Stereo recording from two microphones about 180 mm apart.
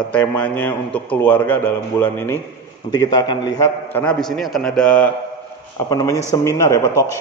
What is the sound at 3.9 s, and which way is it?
A man's voice, 5° left (ahead or behind).